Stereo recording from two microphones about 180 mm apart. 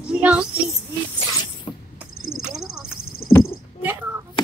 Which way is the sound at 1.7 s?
30° left (ahead or behind).